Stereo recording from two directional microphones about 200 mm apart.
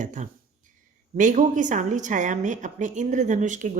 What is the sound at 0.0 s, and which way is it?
A woman's voice, 40° right (ahead or behind).